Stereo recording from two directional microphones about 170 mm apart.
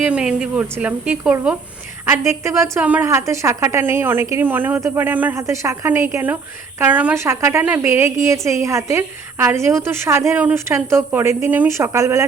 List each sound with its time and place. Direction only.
0.1 s a woman's voice: 5° right (ahead or behind)